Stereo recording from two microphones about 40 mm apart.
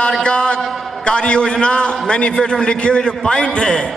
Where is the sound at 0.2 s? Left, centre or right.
Left.